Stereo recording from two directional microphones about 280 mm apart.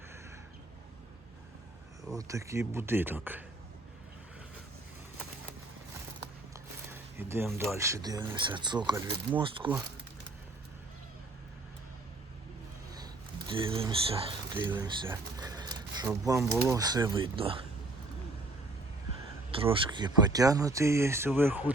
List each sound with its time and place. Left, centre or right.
2.1 s speech: centre
6.9 s a sound: centre
7.8 s speech: centre
13.5 s speech: centre
19.6 s speech: centre